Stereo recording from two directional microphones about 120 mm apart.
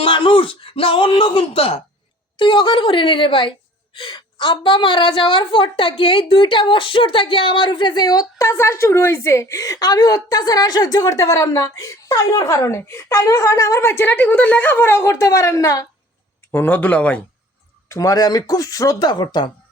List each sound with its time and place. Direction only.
0.0 s a woman's voice: 45° left (ahead or behind); by 15.9 s 30° left (ahead or behind)
16.5 s speech: 15° left (ahead or behind)
17.8 s speech: 25° left (ahead or behind)